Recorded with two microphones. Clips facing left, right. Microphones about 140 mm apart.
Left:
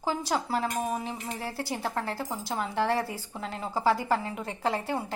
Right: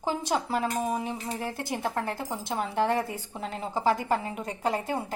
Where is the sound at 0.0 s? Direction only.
20° right (ahead or behind).